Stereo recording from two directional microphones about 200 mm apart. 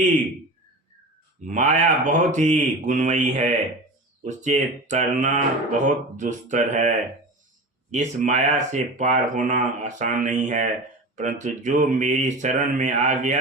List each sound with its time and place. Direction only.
1.5 s speech: 40° right (ahead or behind)